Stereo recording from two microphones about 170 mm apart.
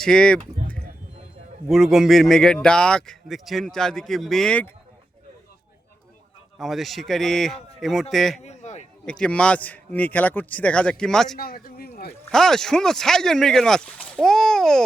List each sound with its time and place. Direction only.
0.0 s speech: 5° left (ahead or behind)
6.6 s speech: centre (ahead or behind)
8.4 s a sound: 45° left (ahead or behind)
9.0 s speech: 5° left (ahead or behind)
11.3 s speech: 60° left (ahead or behind)
12.3 s speech: 5° left (ahead or behind)